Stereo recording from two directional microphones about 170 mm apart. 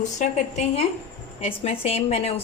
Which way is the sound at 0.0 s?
40° left (ahead or behind).